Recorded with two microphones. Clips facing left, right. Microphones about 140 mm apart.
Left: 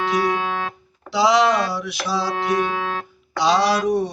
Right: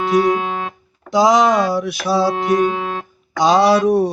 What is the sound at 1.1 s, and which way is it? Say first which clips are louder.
Speech: right 4 dB; 45° right (ahead or behind).